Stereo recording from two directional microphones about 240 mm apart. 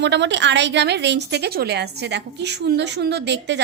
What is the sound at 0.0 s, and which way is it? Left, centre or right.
A woman's voice, right.